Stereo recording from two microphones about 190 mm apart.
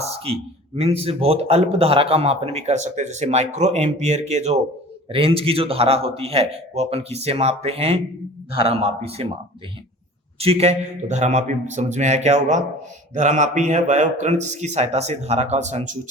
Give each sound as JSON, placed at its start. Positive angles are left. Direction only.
{"t": 0.0, "sound": "a sound", "side_deg": -30}
{"t": 0.8, "sound": "a man's voice", "side_deg": -30}
{"t": 10.3, "sound": "a man's voice", "side_deg": -30}